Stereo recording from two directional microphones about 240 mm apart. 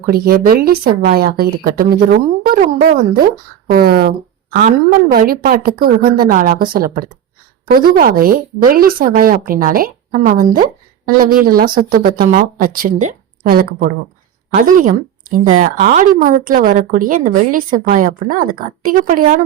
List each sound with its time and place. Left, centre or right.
0.0 s speech: right
3.7 s speech: right